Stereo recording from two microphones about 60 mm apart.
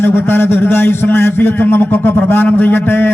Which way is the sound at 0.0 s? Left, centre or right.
Left.